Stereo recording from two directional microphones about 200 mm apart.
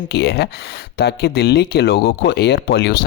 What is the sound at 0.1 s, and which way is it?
Speech, 55° left (ahead or behind).